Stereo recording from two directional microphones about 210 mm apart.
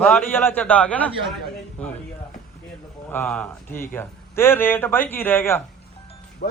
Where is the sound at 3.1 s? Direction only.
10° left (ahead or behind).